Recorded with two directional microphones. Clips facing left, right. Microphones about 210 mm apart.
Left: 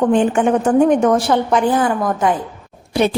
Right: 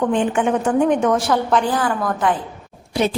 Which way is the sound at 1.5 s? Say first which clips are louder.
Left 3 dB; 20° left (ahead or behind).